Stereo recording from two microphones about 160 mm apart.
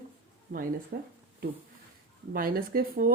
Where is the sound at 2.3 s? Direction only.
65° right (ahead or behind).